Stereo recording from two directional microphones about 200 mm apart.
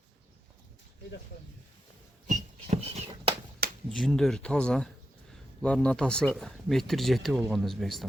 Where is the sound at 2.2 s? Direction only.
35° right (ahead or behind).